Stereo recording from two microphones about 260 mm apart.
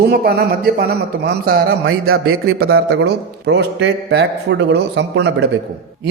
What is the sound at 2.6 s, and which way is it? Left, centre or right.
A man's voice, right.